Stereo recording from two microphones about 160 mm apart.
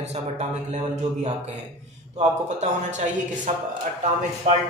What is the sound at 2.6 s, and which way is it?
Speech, 50° right (ahead or behind).